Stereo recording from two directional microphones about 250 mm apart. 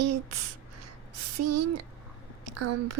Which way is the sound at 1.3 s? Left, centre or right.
Right.